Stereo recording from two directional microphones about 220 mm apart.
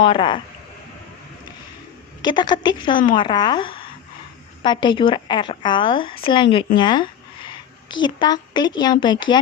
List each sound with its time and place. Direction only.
0.0 s a woman's voice: 20° left (ahead or behind)
2.2 s a woman's voice: 20° left (ahead or behind)